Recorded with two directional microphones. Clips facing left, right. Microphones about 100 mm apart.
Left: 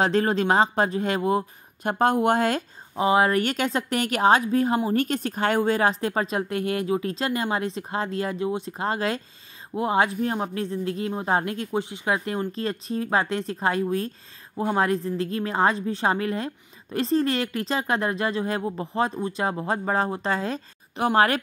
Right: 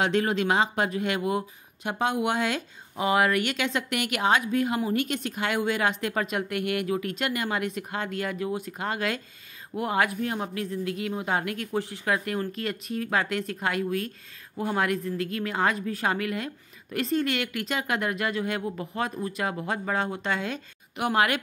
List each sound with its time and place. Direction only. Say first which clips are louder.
0.0 s a woman's voice: left 3 dB; 35° left (ahead or behind)
1.9 s speech: left 6 dB; 45° left (ahead or behind)
3.0 s a woman's voice: left 3 dB; 30° left (ahead or behind)